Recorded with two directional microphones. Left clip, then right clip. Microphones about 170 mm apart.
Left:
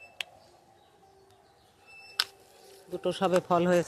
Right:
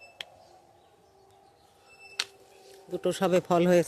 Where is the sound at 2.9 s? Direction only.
40° right (ahead or behind).